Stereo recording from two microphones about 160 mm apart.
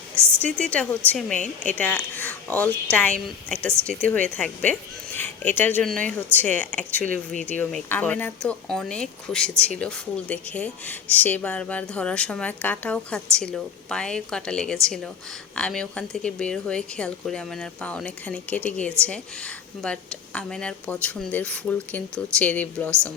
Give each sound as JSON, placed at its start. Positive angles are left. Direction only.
{"t": 0.4, "sound": "a woman's voice", "side_deg": 5}